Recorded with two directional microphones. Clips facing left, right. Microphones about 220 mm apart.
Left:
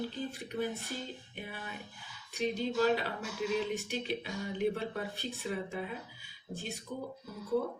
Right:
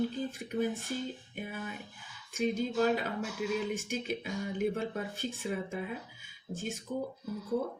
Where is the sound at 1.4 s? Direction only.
45° right (ahead or behind).